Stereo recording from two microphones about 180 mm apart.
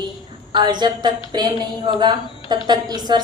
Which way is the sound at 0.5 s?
25° right (ahead or behind).